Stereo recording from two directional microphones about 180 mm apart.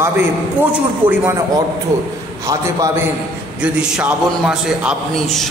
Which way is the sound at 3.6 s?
5° right (ahead or behind).